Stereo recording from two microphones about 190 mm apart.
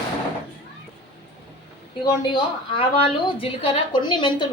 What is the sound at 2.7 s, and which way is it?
A woman's voice, 30° left (ahead or behind).